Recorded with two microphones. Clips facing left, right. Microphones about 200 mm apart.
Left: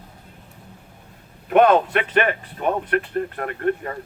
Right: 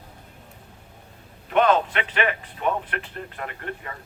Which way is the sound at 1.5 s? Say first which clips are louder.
Left 5 dB; 55° left (ahead or behind).